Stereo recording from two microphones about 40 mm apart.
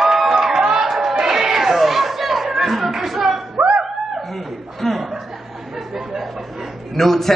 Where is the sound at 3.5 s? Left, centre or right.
Right.